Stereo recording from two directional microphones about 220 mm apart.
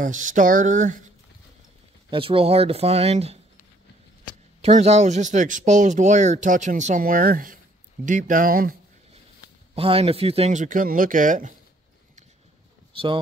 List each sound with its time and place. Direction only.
0.0 s speech: 35° right (ahead or behind)
2.0 s speech: 25° right (ahead or behind)
4.6 s speech: 30° right (ahead or behind)
9.8 s speech: 25° right (ahead or behind)